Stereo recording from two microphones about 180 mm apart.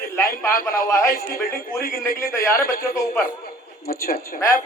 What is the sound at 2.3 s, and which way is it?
Speech, 15° left (ahead or behind).